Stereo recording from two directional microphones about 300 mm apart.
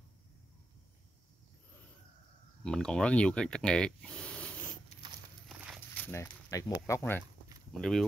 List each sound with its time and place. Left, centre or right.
2.6 s speech: centre